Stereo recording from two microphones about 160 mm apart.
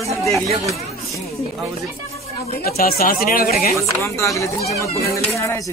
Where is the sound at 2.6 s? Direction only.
70° left (ahead or behind).